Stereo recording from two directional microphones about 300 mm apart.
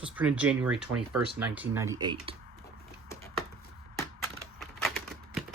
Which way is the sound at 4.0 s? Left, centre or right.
Centre.